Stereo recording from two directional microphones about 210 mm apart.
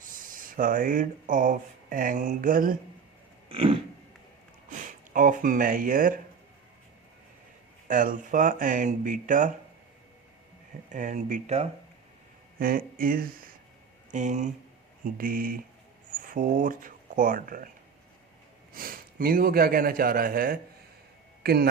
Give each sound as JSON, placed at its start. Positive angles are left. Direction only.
{"t": 0.0, "sound": "speech", "side_deg": -40}
{"t": 3.5, "sound": "a sound", "side_deg": -25}
{"t": 4.7, "sound": "speech", "side_deg": -40}
{"t": 7.9, "sound": "speech", "side_deg": -40}
{"t": 10.9, "sound": "speech", "side_deg": -35}
{"t": 12.5, "sound": "a man's voice", "side_deg": -45}
{"t": 18.7, "sound": "a man's voice", "side_deg": -40}